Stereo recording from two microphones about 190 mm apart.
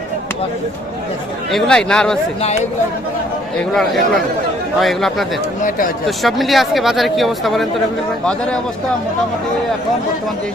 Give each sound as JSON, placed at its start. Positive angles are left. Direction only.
{"t": 1.5, "sound": "speech", "side_deg": 0}
{"t": 3.8, "sound": "speech", "side_deg": 0}